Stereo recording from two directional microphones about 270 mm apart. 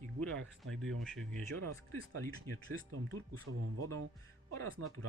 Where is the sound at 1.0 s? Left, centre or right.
Centre.